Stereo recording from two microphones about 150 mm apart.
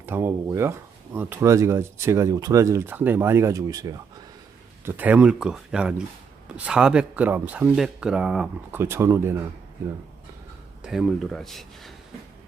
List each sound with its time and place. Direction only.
0.0 s speech: 15° right (ahead or behind)
4.9 s speech: 10° right (ahead or behind)
8.7 s speech: 15° right (ahead or behind)
10.8 s speech: 5° right (ahead or behind)